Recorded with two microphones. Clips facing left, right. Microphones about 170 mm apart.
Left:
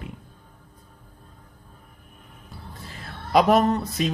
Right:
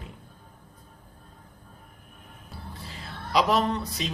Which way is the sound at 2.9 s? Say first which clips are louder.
Left 7 dB; 50° left (ahead or behind).